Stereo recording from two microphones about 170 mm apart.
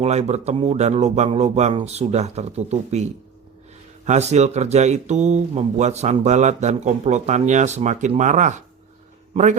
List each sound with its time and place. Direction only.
0.0 s a man's voice: 40° right (ahead or behind)